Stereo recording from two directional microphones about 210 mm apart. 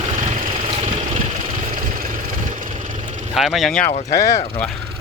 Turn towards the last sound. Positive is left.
turn(degrees=40)  # may be behind; listen again after turning